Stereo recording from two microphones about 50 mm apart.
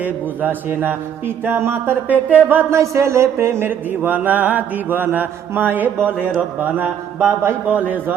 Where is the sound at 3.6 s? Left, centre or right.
Right.